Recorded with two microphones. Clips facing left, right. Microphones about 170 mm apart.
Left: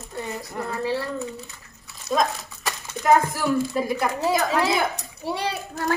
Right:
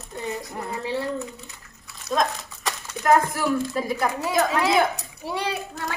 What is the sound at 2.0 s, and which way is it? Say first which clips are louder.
Speech: left 1 dB; centre (ahead or behind).